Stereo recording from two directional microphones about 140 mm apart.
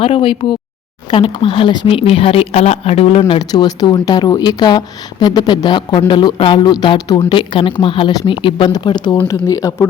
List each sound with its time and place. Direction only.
0.0 s speech: 40° left (ahead or behind)